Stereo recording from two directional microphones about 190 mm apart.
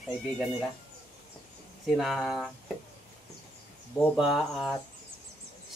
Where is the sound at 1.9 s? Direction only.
Centre (ahead or behind).